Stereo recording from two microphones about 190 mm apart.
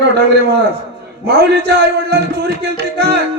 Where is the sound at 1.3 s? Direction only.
60° right (ahead or behind).